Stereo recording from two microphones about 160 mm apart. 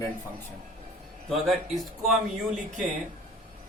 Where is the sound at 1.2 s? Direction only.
Centre (ahead or behind).